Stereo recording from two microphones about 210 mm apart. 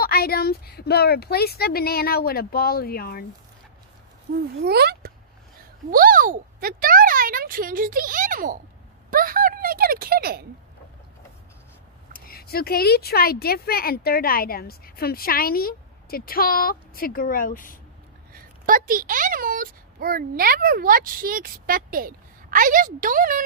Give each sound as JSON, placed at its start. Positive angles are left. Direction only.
{"t": 0.0, "sound": "speech", "side_deg": 45}
{"t": 4.6, "sound": "speech", "side_deg": -50}
{"t": 12.1, "sound": "speech", "side_deg": 45}
{"t": 18.3, "sound": "speech", "side_deg": -40}